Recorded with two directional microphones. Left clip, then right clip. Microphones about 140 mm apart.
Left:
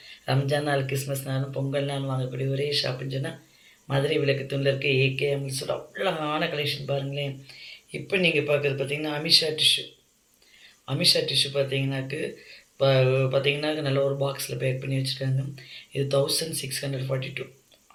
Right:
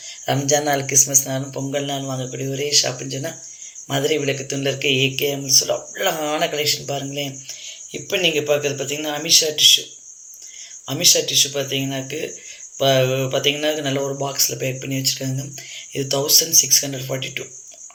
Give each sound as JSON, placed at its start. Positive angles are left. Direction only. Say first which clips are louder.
{"t": 0.3, "sound": "a man's voice", "louder": "right 7 dB", "side_deg": -35}
{"t": 10.8, "sound": "a man's voice", "louder": "right 5 dB", "side_deg": -40}